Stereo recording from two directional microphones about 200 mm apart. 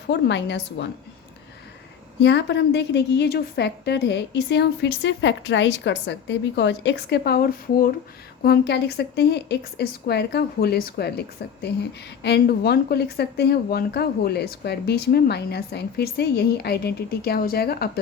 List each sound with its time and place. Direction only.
0.1 s a woman's voice: 60° left (ahead or behind)
2.2 s a woman's voice: 60° left (ahead or behind)
12.2 s speech: 55° left (ahead or behind)